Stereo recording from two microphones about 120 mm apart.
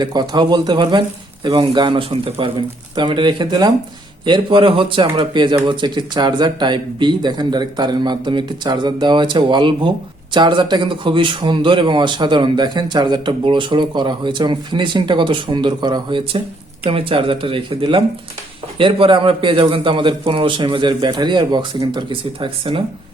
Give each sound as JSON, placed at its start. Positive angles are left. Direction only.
{"t": 0.0, "sound": "a man's voice", "side_deg": -35}